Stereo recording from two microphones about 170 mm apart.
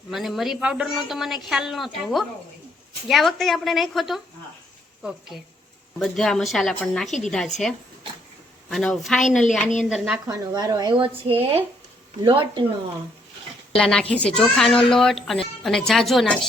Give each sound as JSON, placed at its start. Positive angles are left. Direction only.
{"t": 0.1, "sound": "speech", "side_deg": 0}
{"t": 5.3, "sound": "speech", "side_deg": 0}
{"t": 8.7, "sound": "speech", "side_deg": 0}
{"t": 10.2, "sound": "speech", "side_deg": -25}
{"t": 13.7, "sound": "speech", "side_deg": 5}